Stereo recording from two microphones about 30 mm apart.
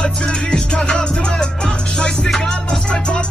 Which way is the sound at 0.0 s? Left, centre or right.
Left.